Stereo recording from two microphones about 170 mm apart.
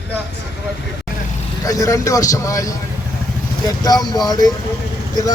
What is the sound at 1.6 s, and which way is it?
Speech, 20° left (ahead or behind).